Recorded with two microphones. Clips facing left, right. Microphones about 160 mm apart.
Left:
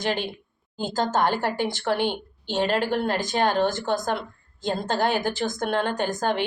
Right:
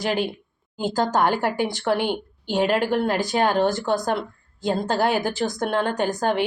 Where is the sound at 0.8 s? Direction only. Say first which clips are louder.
Right 2 dB; 10° right (ahead or behind).